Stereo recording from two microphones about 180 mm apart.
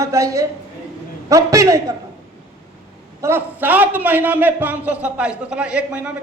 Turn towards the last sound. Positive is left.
turn(degrees=-5)  # may be behind; listen again after turning